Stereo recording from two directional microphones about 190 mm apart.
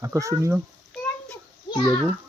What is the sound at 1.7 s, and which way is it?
Speech, 25° left (ahead or behind).